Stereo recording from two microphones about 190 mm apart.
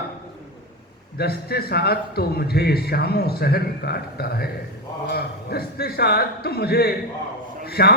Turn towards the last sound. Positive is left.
turn(degrees=55)  # may be behind; listen again after turning